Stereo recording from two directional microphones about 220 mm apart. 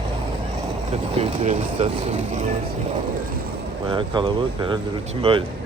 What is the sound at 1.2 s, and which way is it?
Speech, 30° right (ahead or behind).